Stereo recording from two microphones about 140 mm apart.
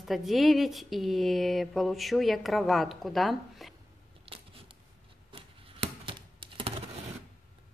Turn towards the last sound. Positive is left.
turn(degrees=-35)  # may be behind; listen again after turning